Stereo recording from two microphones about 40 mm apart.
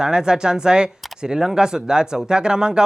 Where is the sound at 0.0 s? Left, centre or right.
Centre.